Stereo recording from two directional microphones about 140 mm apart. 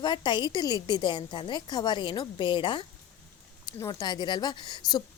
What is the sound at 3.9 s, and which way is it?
A woman's voice, 30° left (ahead or behind).